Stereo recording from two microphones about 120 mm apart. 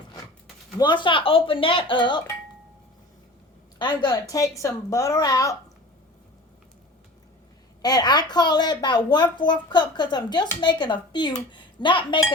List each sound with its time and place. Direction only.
0.8 s speech: 40° left (ahead or behind)
3.8 s a woman's voice: 40° left (ahead or behind)
7.8 s a woman's voice: 35° left (ahead or behind)